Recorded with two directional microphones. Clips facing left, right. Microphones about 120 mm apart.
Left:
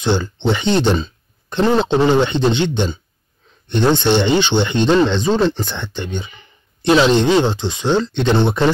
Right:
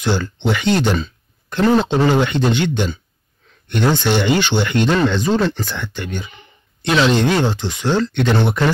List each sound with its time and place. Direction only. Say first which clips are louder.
0.0 s speech: left 2 dB; 25° left (ahead or behind)